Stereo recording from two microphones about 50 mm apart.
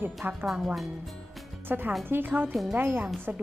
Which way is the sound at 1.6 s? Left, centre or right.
Right.